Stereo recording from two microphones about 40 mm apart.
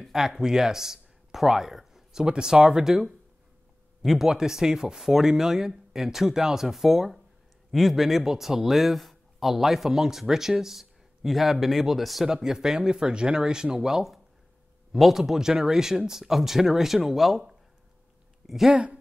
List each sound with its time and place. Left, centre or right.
0.1 s speech: centre
2.2 s speech: centre
2.9 s speech: centre
4.3 s speech: centre
12.3 s speech: centre
18.4 s a sound: centre